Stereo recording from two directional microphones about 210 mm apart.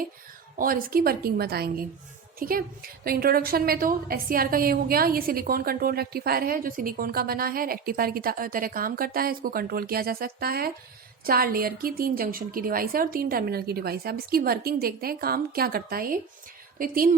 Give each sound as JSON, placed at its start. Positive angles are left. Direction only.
{"t": 0.6, "sound": "a woman's voice", "side_deg": -45}